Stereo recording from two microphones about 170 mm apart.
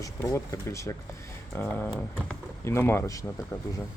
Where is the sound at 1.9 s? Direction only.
5° left (ahead or behind).